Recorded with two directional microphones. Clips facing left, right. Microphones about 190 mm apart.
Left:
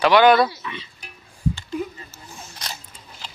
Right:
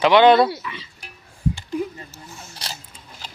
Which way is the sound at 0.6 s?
25° left (ahead or behind).